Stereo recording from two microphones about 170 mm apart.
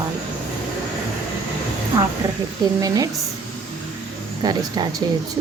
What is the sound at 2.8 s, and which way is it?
Speech, 20° right (ahead or behind).